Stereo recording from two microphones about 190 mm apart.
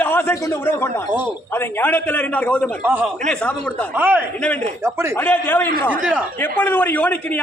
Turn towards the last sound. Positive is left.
turn(degrees=10)  # may be behind; listen again after turning